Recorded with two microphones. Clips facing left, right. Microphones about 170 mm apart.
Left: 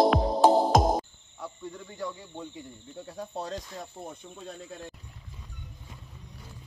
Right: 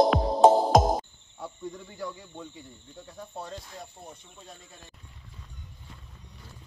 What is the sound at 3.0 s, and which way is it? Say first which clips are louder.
Speech: left 4 dB; 35° left (ahead or behind).